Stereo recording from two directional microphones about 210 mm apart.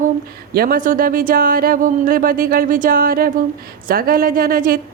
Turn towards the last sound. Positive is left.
turn(degrees=-45)  # may be behind; listen again after turning